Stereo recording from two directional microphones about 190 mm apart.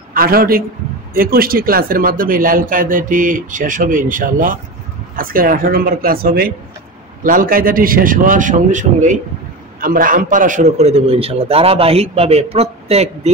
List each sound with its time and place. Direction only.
0.1 s a man's voice: 50° right (ahead or behind); by 13.3 s 35° right (ahead or behind)